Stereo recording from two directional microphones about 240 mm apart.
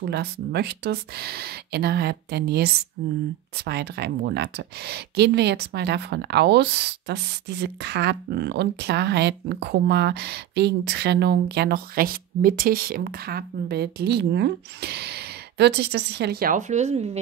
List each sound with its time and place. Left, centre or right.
0.0 s speech: right